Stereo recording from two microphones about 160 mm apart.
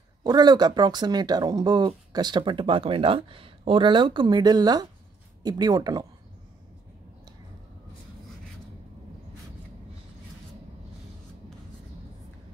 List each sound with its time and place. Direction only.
0.2 s speech: 25° right (ahead or behind)